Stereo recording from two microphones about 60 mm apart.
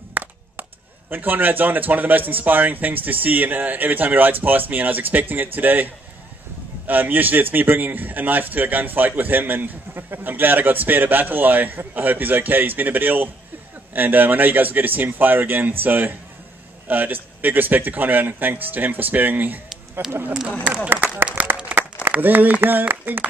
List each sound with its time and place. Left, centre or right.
0.1 s chop: right
1.1 s a man's voice: right
6.9 s a man's voice: right
20.6 s a man's voice: right
22.2 s a man's voice: right